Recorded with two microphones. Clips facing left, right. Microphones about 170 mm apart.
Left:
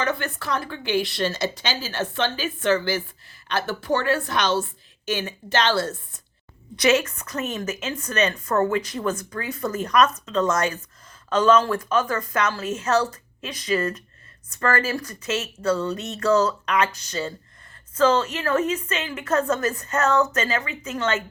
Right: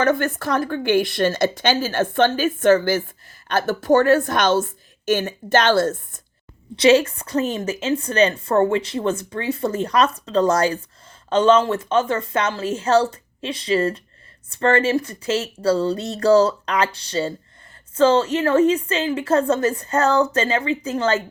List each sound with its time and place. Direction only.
0.0 s a woman's voice: 45° right (ahead or behind)
6.7 s a woman's voice: 30° right (ahead or behind)